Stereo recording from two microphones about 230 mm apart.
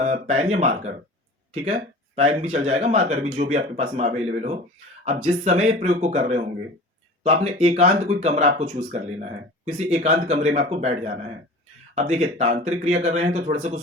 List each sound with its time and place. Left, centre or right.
0.0 s speech: right